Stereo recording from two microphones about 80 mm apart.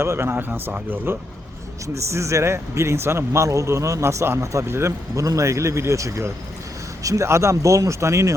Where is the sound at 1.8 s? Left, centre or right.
Right.